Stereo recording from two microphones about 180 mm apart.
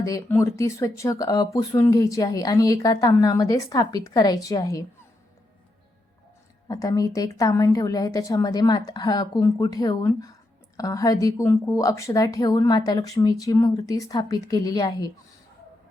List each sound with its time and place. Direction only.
0.0 s speech: 15° left (ahead or behind)
6.7 s speech: 20° left (ahead or behind)